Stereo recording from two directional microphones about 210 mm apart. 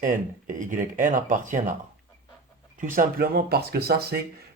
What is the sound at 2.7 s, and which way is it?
Speech, 40° right (ahead or behind).